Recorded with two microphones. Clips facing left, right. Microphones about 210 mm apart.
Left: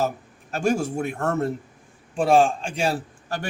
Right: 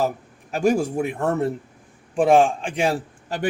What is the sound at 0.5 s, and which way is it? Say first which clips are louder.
Speech: right 3 dB; 15° right (ahead or behind).